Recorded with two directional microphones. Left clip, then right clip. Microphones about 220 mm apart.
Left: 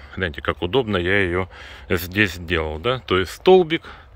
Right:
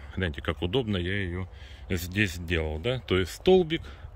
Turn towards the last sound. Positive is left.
turn(degrees=-5)  # may be behind; listen again after turning